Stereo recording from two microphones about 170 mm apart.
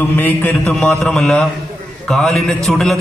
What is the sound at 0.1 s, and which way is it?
A man's voice, 10° left (ahead or behind).